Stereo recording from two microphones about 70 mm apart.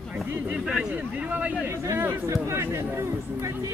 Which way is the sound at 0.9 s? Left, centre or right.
Centre.